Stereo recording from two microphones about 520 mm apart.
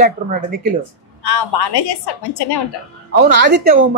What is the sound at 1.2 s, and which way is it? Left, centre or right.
A woman's voice, left.